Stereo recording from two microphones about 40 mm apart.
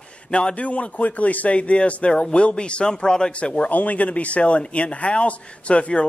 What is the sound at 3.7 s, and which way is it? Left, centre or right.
Speech, left.